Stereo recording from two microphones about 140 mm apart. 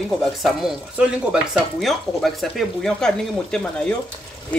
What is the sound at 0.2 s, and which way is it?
Speech, centre (ahead or behind).